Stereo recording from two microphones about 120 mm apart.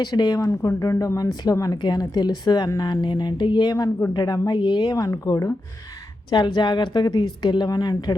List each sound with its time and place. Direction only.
0.0 s speech: 35° left (ahead or behind)
6.3 s speech: 40° left (ahead or behind)